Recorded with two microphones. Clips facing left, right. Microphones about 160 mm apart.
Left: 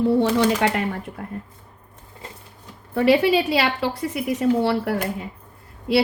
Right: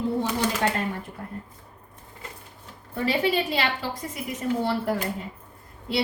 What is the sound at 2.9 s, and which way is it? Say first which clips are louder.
A woman's voice: left 7 dB; 85° left.